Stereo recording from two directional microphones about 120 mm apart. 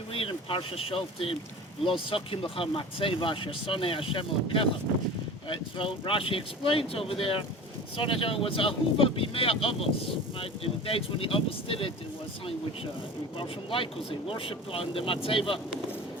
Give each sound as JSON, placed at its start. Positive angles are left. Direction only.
{"t": 0.1, "sound": "speech", "side_deg": 50}
{"t": 13.3, "sound": "speech", "side_deg": 45}